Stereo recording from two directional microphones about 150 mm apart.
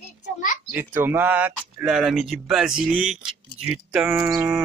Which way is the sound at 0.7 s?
10° right (ahead or behind).